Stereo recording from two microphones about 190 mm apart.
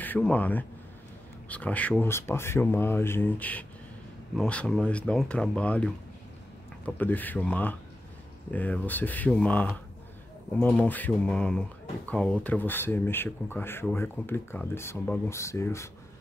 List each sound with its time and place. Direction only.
0.0 s speech: 10° left (ahead or behind)
6.9 s speech: 10° left (ahead or behind)